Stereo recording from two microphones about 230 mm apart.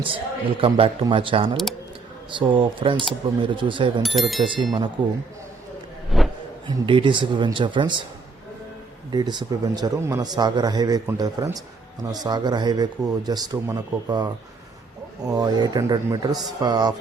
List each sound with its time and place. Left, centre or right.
0.0 s a man's voice: right
4.0 s speech: centre
4.4 s a man's voice: right
6.1 s a sound: centre
6.7 s a man's voice: right
9.1 s a man's voice: centre